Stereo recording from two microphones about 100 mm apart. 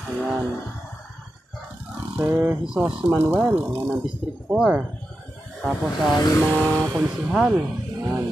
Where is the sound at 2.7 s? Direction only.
10° right (ahead or behind).